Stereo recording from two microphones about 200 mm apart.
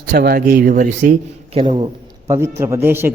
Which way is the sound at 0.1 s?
55° right (ahead or behind).